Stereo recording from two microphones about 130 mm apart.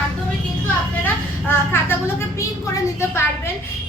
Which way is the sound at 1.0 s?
15° left (ahead or behind).